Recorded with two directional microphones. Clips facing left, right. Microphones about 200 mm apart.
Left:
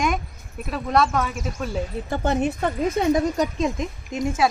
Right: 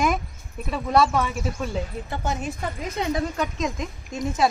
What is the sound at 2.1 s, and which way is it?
Speech, 60° left (ahead or behind).